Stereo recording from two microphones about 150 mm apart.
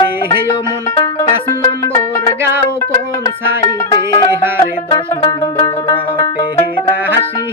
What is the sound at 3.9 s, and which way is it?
Music, 30° left (ahead or behind).